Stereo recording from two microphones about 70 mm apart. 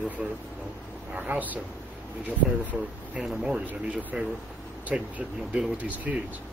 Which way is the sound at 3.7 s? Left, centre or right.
Right.